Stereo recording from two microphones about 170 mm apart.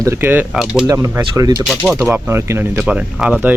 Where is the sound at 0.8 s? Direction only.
20° right (ahead or behind).